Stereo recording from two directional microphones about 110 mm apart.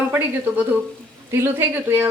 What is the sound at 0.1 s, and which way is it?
A woman's voice, 20° right (ahead or behind).